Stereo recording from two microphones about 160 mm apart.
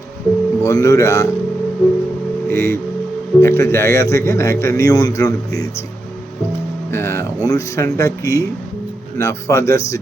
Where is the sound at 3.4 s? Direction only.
15° left (ahead or behind).